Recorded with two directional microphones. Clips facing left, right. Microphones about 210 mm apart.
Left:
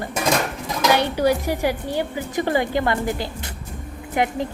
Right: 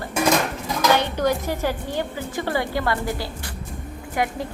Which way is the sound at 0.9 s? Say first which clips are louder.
Left 2 dB; 10° left (ahead or behind).